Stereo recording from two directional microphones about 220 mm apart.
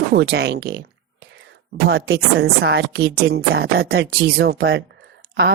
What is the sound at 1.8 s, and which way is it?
A woman's voice, 50° right (ahead or behind).